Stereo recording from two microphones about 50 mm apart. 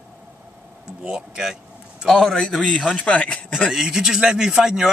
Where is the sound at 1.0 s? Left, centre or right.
Centre.